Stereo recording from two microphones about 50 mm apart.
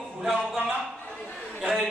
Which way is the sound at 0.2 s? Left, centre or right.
Centre.